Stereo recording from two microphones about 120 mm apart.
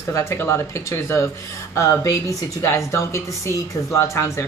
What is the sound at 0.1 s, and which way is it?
Speech, 25° left (ahead or behind).